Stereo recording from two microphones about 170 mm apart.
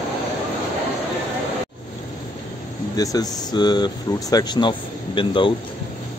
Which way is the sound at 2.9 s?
20° left (ahead or behind).